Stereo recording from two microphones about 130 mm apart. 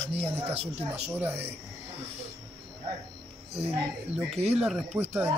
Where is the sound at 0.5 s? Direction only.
55° right (ahead or behind).